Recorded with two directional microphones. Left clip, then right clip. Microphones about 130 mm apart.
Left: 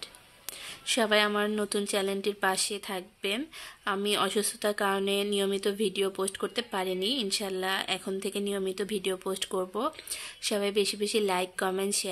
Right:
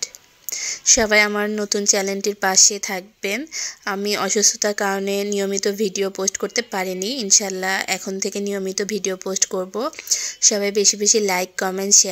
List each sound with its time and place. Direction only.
0.8 s a woman's voice: 40° right (ahead or behind)